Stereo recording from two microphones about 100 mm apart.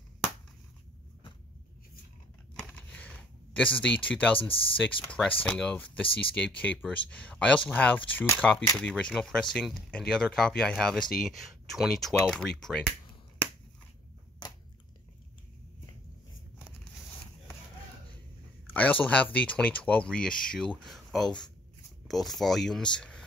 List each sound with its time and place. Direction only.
2.5 s a sound: 15° left (ahead or behind)
4.4 s speech: 60° left (ahead or behind)
5.0 s speech: 10° left (ahead or behind)
8.4 s speech: 10° left (ahead or behind)
18.7 s speech: 15° left (ahead or behind)